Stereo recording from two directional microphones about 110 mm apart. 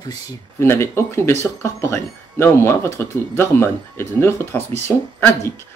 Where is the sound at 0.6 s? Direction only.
20° left (ahead or behind).